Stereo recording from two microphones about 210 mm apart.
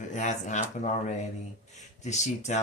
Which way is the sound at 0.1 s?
35° left (ahead or behind).